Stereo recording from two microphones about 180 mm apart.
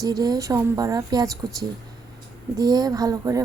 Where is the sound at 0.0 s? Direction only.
20° right (ahead or behind).